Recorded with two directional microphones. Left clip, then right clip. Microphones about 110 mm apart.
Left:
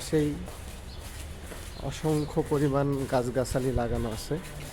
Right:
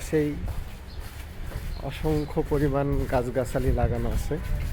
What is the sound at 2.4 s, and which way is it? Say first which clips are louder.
Speech: right 1 dB; 5° left (ahead or behind).